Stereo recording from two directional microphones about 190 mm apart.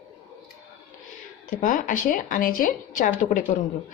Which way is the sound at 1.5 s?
45° left (ahead or behind).